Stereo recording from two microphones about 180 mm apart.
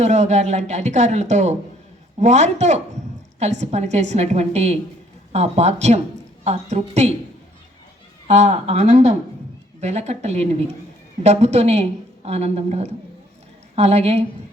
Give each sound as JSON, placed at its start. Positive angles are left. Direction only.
{"t": 0.0, "sound": "a woman's voice", "side_deg": -40}
{"t": 8.3, "sound": "a woman's voice", "side_deg": -40}